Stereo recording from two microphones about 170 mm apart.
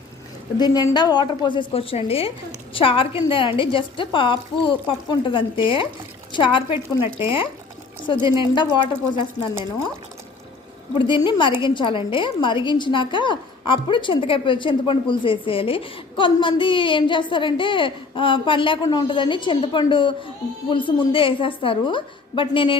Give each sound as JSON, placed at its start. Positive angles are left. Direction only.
{"t": 0.6, "sound": "a woman's voice", "side_deg": 25}
{"t": 10.9, "sound": "a woman's voice", "side_deg": 30}